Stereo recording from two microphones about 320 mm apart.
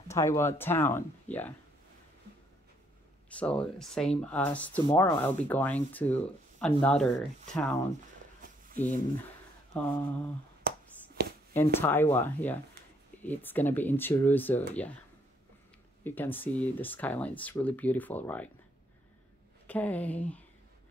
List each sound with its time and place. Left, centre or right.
0.1 s speech: centre
3.3 s speech: centre
8.7 s speech: left
9.8 s speech: centre
10.6 s finger snapping: right
11.2 s a sound: right
11.5 s speech: centre
16.0 s speech: centre
19.7 s speech: centre